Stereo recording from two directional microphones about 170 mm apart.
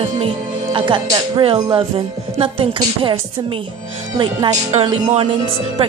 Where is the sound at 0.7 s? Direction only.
30° right (ahead or behind).